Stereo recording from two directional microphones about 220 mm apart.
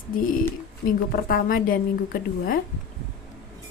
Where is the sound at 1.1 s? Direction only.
40° left (ahead or behind).